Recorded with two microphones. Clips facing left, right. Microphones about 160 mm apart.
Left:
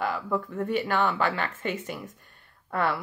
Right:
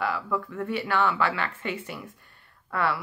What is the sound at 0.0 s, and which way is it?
Speech, 45° left (ahead or behind).